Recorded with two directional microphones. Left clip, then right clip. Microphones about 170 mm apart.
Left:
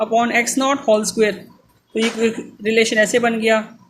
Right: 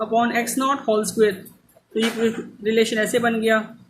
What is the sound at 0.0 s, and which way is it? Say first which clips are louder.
Speech: left 4 dB; 25° left (ahead or behind).